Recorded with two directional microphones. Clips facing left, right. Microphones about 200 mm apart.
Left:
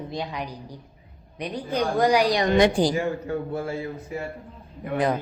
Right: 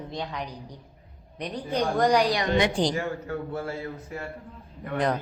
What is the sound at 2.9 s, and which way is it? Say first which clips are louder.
A woman's voice: left 4 dB; 15° left (ahead or behind).